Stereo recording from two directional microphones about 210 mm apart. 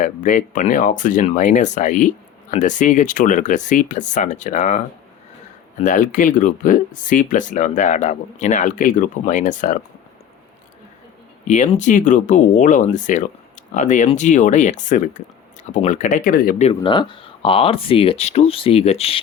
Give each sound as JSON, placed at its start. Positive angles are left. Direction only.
{"t": 0.0, "sound": "speech", "side_deg": 40}
{"t": 5.8, "sound": "speech", "side_deg": 40}
{"t": 11.4, "sound": "speech", "side_deg": 35}